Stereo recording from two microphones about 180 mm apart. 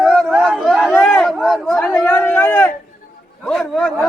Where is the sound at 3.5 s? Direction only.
Centre (ahead or behind).